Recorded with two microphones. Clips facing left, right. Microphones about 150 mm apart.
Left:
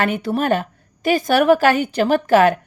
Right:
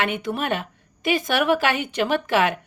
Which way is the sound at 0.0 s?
35° left (ahead or behind).